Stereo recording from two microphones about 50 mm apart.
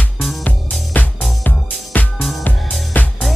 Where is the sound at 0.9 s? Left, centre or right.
Left.